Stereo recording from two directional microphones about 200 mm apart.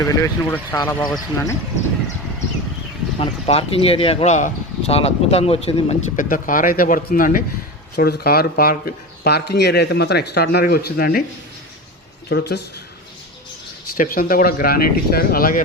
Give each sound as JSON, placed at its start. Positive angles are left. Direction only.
{"t": 0.0, "sound": "speech", "side_deg": 15}
{"t": 3.2, "sound": "speech", "side_deg": 30}
{"t": 6.2, "sound": "speech", "side_deg": 45}
{"t": 12.3, "sound": "speech", "side_deg": 55}
{"t": 13.9, "sound": "speech", "side_deg": 45}